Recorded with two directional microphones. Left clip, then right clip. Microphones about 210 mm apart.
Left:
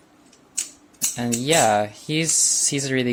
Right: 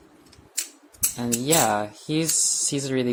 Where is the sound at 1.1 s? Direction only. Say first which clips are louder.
Left 3 dB; 30° left (ahead or behind).